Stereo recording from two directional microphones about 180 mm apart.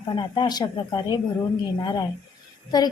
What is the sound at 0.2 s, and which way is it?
Speech, 25° left (ahead or behind).